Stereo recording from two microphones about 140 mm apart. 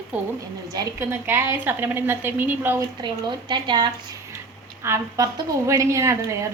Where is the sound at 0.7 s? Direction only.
25° right (ahead or behind).